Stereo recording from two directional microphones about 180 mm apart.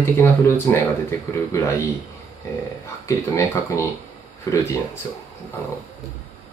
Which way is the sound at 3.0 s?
15° left (ahead or behind).